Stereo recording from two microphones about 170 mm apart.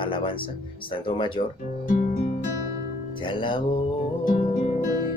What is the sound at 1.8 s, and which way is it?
Music, 55° left (ahead or behind).